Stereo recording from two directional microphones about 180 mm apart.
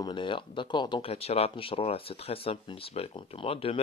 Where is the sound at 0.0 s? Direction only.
25° left (ahead or behind).